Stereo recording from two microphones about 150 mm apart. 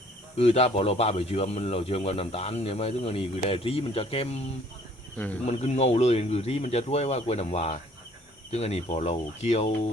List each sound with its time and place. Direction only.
0.3 s speech: 45° left (ahead or behind)
5.1 s speech: 10° left (ahead or behind)
5.5 s speech: 45° left (ahead or behind)